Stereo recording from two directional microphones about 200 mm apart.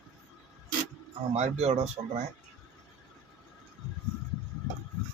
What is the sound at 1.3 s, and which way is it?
Speech, 35° right (ahead or behind).